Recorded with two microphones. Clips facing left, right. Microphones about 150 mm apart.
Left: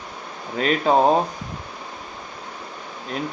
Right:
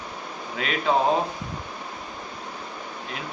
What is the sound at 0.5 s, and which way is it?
Speech, 40° left (ahead or behind).